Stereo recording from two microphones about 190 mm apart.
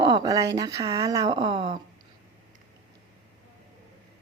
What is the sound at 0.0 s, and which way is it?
Speech, 20° right (ahead or behind).